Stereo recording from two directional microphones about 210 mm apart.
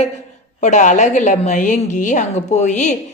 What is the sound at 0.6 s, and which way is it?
A woman's voice, 35° left (ahead or behind).